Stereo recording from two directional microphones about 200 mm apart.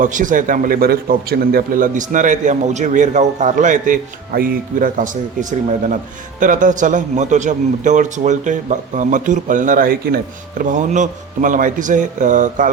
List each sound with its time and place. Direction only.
0.0 s a man's voice: 40° right (ahead or behind)